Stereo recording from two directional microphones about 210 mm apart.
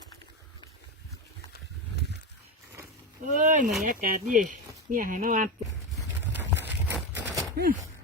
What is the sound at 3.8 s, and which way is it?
Speech, 40° right (ahead or behind).